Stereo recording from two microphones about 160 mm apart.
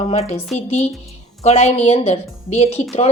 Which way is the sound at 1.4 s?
45° left (ahead or behind).